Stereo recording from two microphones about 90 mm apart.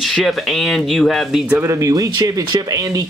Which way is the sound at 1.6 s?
35° right (ahead or behind).